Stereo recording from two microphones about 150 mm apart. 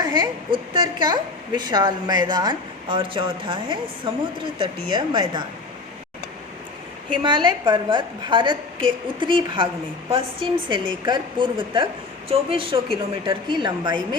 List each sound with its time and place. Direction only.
0.0 s a woman's voice: 30° right (ahead or behind)
7.2 s a woman's voice: 30° right (ahead or behind)